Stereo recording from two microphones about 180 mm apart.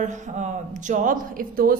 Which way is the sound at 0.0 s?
45° right (ahead or behind).